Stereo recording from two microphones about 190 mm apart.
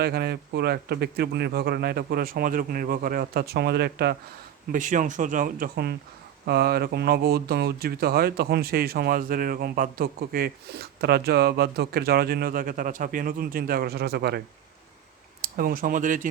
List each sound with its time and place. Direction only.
0.0 s speech: 55° right (ahead or behind)
4.7 s speech: 45° right (ahead or behind)